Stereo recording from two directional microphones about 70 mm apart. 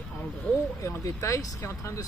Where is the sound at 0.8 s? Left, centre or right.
Left.